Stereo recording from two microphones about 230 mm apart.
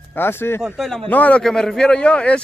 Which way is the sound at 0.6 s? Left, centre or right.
Centre.